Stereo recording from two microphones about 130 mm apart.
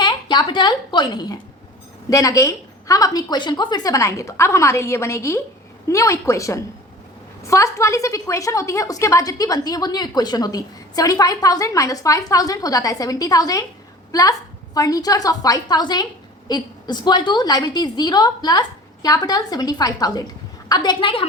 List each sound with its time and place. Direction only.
0.0 s a woman's voice: 35° left (ahead or behind)